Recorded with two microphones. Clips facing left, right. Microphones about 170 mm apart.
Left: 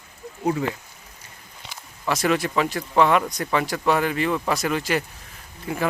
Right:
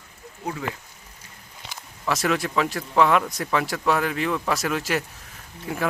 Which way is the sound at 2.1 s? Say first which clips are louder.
Left 2 dB; centre (ahead or behind).